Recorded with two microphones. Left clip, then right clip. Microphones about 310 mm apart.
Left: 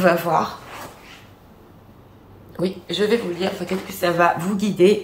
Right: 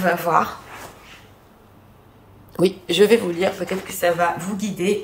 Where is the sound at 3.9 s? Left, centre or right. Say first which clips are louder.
Left 2 dB; centre.